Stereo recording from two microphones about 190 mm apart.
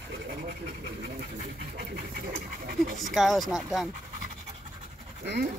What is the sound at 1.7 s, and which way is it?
Speech, 50° right (ahead or behind).